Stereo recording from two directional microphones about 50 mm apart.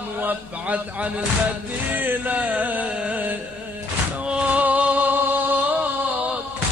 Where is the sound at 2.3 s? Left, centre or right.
Right.